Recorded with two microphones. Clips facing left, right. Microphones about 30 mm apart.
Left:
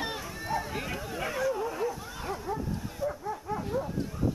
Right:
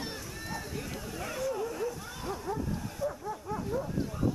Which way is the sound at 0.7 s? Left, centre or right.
Left.